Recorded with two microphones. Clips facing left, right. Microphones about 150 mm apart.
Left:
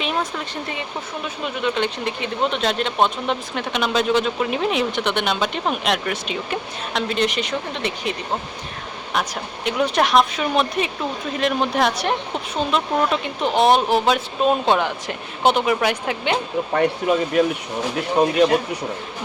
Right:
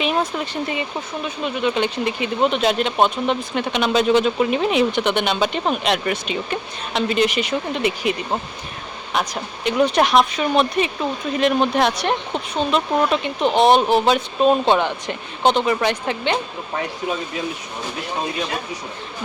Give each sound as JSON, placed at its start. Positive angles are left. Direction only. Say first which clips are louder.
{"t": 0.3, "sound": "speech", "louder": "right 4 dB", "side_deg": -5}
{"t": 9.1, "sound": "speech", "louder": "right 1 dB", "side_deg": 0}
{"t": 16.7, "sound": "speech", "louder": "left 6 dB", "side_deg": 65}